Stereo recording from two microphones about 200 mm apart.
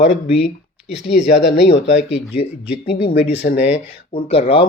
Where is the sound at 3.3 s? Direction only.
55° left (ahead or behind).